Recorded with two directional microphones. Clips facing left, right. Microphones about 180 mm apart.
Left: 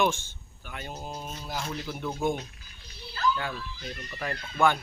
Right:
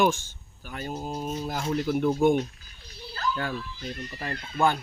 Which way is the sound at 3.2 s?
45° right (ahead or behind).